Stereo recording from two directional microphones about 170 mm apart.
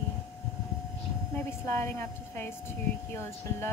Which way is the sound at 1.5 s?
15° left (ahead or behind).